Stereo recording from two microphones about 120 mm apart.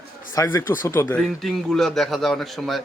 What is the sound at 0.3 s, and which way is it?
Speech, 25° left (ahead or behind).